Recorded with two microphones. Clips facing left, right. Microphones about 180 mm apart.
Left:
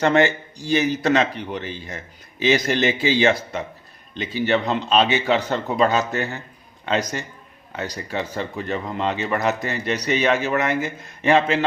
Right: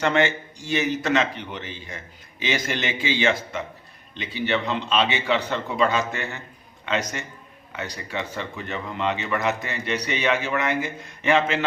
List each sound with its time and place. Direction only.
0.0 s speech: 40° left (ahead or behind)